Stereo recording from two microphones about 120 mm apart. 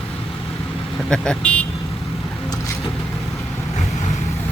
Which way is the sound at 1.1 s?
5° left (ahead or behind).